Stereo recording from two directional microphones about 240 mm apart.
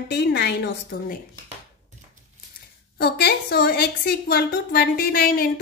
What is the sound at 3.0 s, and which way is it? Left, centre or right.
A woman's voice, left.